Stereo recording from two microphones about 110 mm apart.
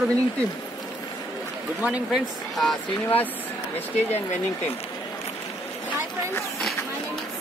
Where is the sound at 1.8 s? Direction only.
15° right (ahead or behind).